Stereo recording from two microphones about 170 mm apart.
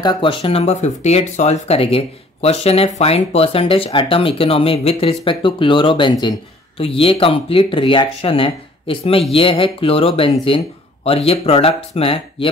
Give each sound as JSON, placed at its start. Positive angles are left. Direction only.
{"t": 0.0, "sound": "speech", "side_deg": 25}